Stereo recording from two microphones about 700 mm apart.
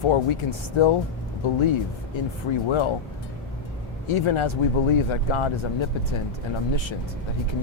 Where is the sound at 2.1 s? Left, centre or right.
Left.